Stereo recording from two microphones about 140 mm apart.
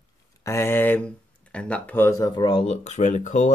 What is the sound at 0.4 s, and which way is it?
Speech, 20° left (ahead or behind).